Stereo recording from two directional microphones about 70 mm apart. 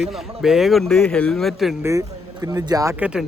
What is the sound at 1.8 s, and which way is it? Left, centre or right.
Speech, right.